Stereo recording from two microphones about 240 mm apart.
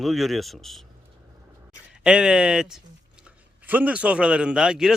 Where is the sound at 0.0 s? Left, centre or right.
Centre.